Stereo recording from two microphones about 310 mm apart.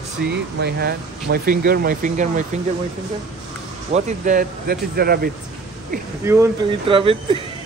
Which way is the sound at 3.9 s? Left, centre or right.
Right.